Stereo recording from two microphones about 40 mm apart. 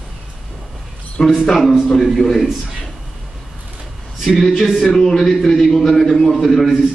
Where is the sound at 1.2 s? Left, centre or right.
Centre.